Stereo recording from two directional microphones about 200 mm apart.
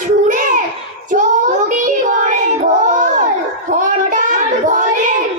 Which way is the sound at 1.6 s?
40° right (ahead or behind).